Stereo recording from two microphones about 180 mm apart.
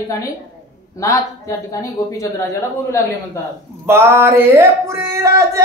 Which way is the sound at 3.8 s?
15° right (ahead or behind).